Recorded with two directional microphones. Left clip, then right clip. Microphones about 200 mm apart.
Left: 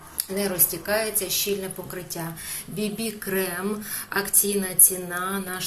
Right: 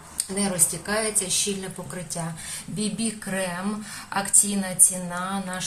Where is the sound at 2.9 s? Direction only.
10° left (ahead or behind).